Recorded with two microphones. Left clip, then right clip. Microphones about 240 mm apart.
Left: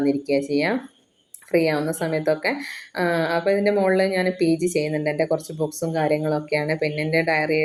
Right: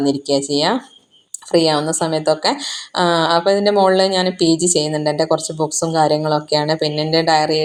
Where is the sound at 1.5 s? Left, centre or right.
Right.